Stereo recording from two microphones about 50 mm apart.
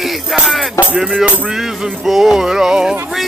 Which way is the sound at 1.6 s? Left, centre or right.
Centre.